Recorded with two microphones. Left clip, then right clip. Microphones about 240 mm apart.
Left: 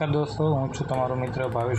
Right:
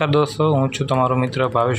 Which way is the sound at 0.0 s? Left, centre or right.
Right.